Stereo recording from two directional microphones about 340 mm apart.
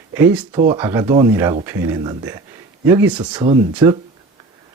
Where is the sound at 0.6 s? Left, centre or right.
Centre.